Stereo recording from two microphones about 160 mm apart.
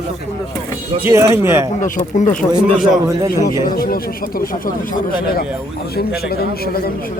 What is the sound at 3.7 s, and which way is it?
Speech, 65° left (ahead or behind).